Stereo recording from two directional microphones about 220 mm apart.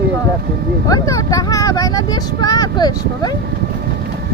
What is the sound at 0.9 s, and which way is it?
Speech, 15° left (ahead or behind).